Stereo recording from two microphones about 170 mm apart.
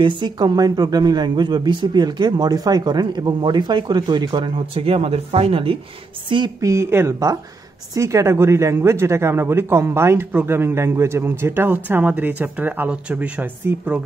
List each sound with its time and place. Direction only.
0.0 s speech: 25° right (ahead or behind); by 14.0 s 10° right (ahead or behind)